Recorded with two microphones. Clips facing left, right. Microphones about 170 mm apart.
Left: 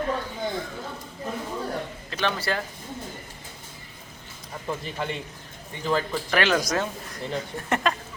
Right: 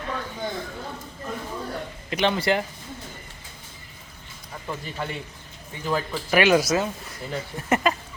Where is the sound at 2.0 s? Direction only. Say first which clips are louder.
Right 6 dB; 15° right (ahead or behind).